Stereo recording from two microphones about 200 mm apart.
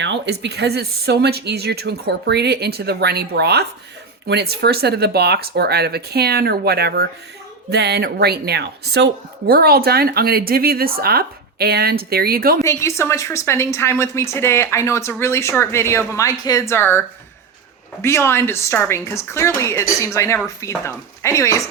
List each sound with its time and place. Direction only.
0.0 s speech: 60° right (ahead or behind)
12.6 s speech: 15° left (ahead or behind)